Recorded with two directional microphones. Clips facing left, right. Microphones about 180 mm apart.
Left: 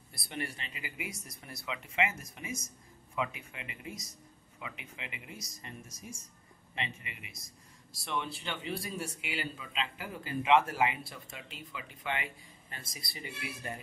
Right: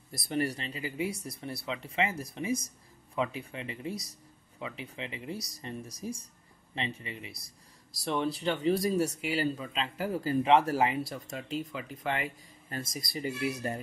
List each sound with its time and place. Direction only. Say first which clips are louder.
0.1 s speech: right 9 dB; 40° right (ahead or behind)